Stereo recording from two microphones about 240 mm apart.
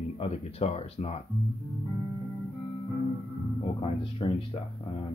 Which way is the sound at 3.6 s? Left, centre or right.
Left.